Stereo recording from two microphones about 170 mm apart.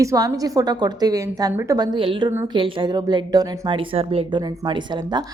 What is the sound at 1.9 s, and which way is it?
Speech, 30° right (ahead or behind).